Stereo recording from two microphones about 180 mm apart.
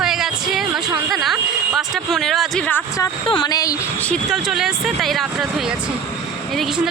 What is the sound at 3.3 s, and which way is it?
Speech, 25° left (ahead or behind).